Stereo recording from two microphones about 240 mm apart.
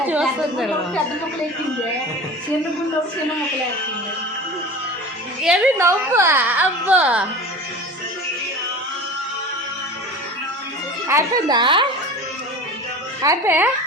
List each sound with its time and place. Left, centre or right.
0.1 s a woman's voice: centre
5.4 s a woman's voice: centre
11.1 s a woman's voice: centre
13.2 s a woman's voice: centre